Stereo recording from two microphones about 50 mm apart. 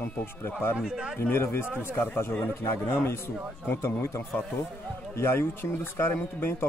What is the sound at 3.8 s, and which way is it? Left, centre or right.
Speech, left.